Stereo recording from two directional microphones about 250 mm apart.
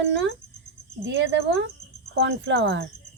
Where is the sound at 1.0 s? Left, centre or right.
Right.